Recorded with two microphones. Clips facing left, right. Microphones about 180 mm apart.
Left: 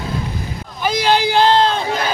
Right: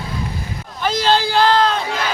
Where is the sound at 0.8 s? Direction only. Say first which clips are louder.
Left 1 dB; 15° left (ahead or behind).